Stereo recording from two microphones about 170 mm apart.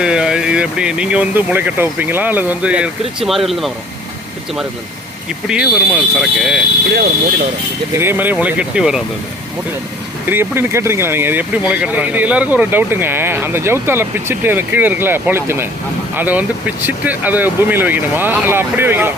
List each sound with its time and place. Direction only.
0.0 s speech: 5° right (ahead or behind)
5.5 s speech: 5° right (ahead or behind)
6.9 s speech: 75° right (ahead or behind)
7.9 s speech: 10° right (ahead or behind)
10.2 s speech: 10° right (ahead or behind)